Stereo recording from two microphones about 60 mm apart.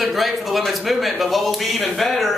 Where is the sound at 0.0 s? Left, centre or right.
Centre.